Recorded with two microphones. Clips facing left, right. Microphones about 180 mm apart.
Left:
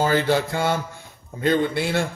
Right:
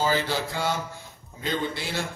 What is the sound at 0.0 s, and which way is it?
A man's voice, 55° left (ahead or behind).